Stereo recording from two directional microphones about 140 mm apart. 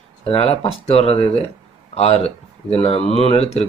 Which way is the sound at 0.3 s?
45° left (ahead or behind).